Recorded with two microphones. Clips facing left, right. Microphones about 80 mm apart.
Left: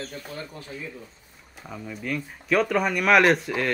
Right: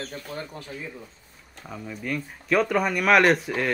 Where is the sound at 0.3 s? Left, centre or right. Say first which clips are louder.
Right 2 dB; right.